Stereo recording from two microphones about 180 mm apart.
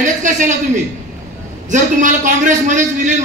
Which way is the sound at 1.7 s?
45° right (ahead or behind).